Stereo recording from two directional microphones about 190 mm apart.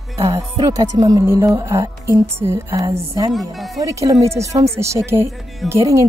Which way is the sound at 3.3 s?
Centre (ahead or behind).